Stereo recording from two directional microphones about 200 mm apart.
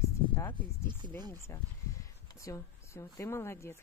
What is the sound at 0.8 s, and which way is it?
Speech, 20° right (ahead or behind).